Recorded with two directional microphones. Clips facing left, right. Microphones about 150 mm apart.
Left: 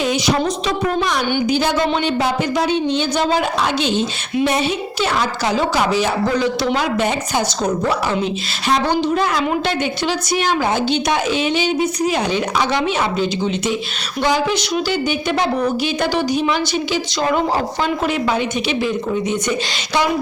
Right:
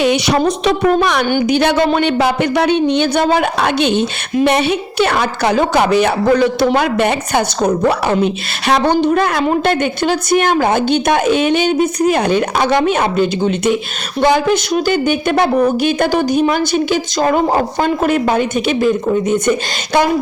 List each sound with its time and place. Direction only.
0.0 s a woman's voice: 65° right (ahead or behind); by 20.1 s 50° right (ahead or behind)